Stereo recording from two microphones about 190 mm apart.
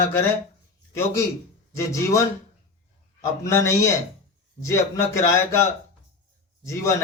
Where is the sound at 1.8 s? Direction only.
15° left (ahead or behind).